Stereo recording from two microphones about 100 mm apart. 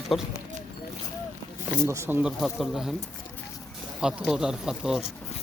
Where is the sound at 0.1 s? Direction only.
Centre (ahead or behind).